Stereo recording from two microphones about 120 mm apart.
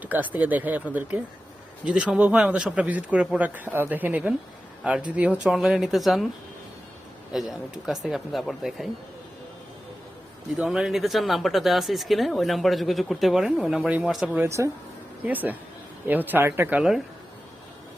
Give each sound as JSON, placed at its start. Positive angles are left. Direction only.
{"t": 0.0, "sound": "speech", "side_deg": -15}
{"t": 7.3, "sound": "speech", "side_deg": 0}
{"t": 10.6, "sound": "speech", "side_deg": -5}
{"t": 14.4, "sound": "speech", "side_deg": -25}
{"t": 15.2, "sound": "speech", "side_deg": -15}